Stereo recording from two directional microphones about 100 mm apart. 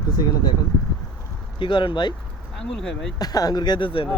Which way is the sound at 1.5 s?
55° left (ahead or behind).